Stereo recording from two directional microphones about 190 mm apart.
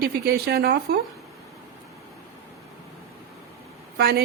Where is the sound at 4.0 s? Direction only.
55° right (ahead or behind).